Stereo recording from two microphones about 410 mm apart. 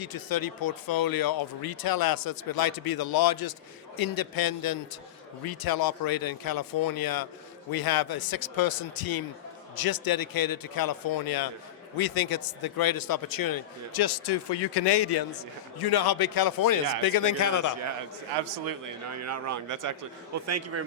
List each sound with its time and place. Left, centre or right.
0.0 s a man's voice: left
18.6 s speech: right
20.5 s a man's voice: right